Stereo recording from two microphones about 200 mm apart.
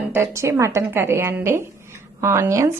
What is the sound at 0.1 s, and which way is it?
A woman's voice, 10° right (ahead or behind).